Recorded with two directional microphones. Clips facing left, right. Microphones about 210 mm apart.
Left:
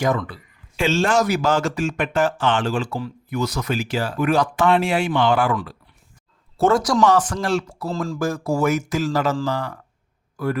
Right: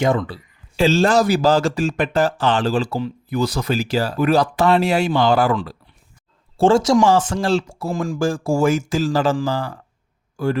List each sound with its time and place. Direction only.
0.0 s speech: 25° right (ahead or behind)
6.6 s speech: 30° right (ahead or behind)
7.9 s speech: 15° right (ahead or behind)
8.2 s a man's voice: 30° right (ahead or behind)